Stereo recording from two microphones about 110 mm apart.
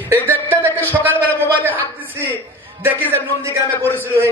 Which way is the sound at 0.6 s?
15° left (ahead or behind).